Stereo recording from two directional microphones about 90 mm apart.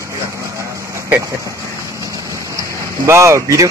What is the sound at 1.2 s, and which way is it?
Speech, 35° right (ahead or behind).